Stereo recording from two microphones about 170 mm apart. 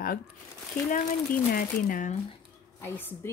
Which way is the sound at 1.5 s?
55° left (ahead or behind).